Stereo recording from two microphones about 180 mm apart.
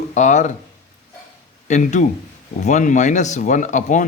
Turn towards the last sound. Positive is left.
turn(degrees=45)  # may be behind; listen again after turning